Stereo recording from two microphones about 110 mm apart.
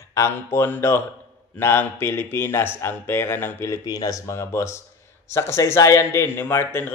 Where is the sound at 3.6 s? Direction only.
35° left (ahead or behind).